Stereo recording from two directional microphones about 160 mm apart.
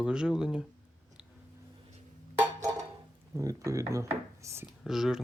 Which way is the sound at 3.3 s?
20° right (ahead or behind).